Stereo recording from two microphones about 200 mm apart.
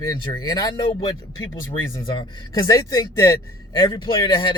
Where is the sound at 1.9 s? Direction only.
20° left (ahead or behind).